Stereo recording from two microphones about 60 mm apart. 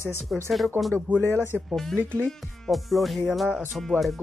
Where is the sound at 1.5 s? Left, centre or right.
Centre.